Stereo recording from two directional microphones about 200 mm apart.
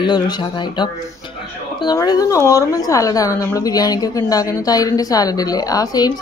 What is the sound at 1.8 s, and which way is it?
A woman's voice, 20° left (ahead or behind).